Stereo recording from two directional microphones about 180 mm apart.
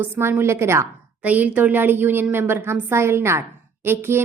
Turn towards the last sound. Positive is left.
turn(degrees=-10)  # may be behind; listen again after turning